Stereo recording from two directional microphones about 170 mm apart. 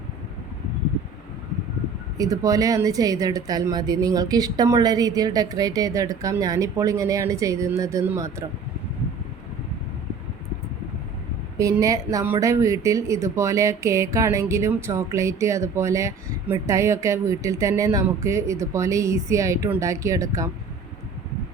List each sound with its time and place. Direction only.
2.1 s speech: 20° right (ahead or behind)
11.5 s speech: 20° right (ahead or behind)